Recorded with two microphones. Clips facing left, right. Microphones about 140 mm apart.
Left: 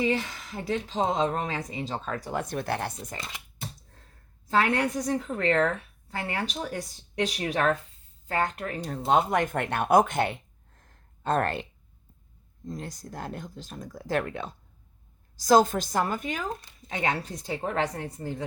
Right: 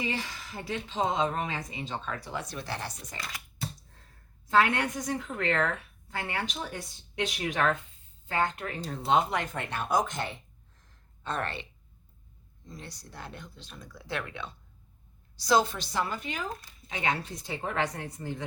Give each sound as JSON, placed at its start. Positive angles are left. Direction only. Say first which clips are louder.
{"t": 0.5, "sound": "speech", "louder": "left 5 dB", "side_deg": 35}
{"t": 3.2, "sound": "typing", "louder": "even", "side_deg": 25}
{"t": 4.4, "sound": "speech", "louder": "left 1 dB", "side_deg": 35}
{"t": 10.8, "sound": "a sound", "louder": "left 4 dB", "side_deg": 50}
{"t": 12.6, "sound": "speech", "louder": "left 8 dB", "side_deg": 45}